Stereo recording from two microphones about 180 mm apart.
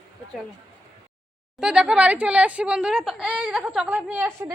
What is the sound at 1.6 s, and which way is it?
A woman's voice, 5° right (ahead or behind).